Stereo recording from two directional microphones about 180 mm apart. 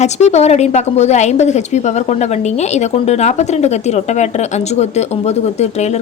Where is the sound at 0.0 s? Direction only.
35° left (ahead or behind).